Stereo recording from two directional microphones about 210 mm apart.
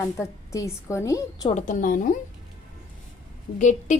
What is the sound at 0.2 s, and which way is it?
A woman's voice, 15° left (ahead or behind).